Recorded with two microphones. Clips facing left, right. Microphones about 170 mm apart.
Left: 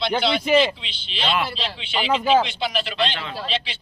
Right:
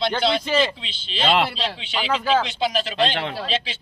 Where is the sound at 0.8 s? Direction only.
45° right (ahead or behind).